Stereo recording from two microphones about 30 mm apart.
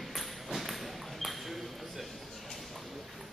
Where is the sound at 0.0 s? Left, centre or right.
Centre.